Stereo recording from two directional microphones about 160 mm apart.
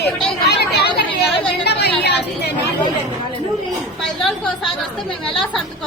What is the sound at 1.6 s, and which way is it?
Chatter, 90° left.